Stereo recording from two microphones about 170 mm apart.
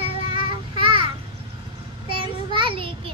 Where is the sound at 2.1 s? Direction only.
30° right (ahead or behind).